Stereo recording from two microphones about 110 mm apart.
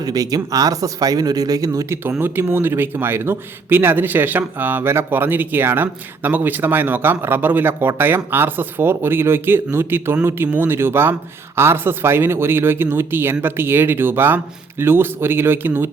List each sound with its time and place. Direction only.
0.0 s speech: 35° right (ahead or behind)
2.2 s speech: 20° right (ahead or behind)